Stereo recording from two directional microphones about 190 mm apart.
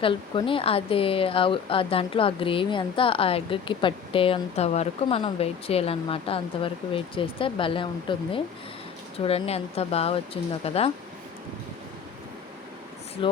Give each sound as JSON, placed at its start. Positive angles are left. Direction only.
{"t": 0.0, "sound": "speech", "side_deg": 25}
{"t": 13.2, "sound": "speech", "side_deg": 25}